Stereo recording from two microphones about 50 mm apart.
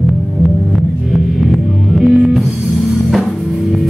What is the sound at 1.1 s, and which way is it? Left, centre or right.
Music, centre.